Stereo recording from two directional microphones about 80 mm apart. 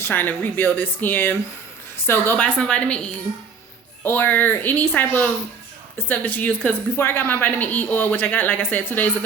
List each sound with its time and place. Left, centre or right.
0.0 s a woman's voice: left
2.6 s a woman's voice: centre
4.0 s a woman's voice: left
6.0 s a woman's voice: left